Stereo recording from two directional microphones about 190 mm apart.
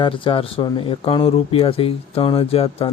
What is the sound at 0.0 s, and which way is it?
Speech, 25° left (ahead or behind).